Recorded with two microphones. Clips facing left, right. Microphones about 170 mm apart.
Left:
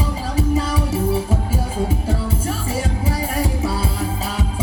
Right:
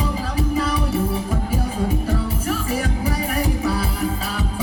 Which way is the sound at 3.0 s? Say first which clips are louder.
Even; 25° left (ahead or behind).